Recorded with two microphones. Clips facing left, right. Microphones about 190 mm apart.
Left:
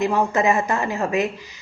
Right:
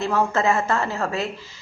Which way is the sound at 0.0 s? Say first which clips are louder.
Left 2 dB; 15° left (ahead or behind).